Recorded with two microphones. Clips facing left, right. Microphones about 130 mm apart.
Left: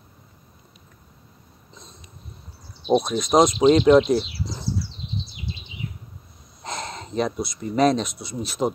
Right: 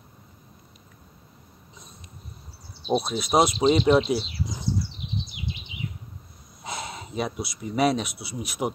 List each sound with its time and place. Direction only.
2.9 s speech: 5° right (ahead or behind)
5.0 s bird: 20° right (ahead or behind)
6.6 s speech: 10° right (ahead or behind)